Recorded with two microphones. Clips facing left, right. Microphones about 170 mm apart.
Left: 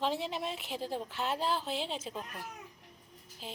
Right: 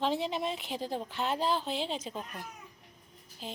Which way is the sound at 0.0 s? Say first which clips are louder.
Right 3 dB; centre (ahead or behind).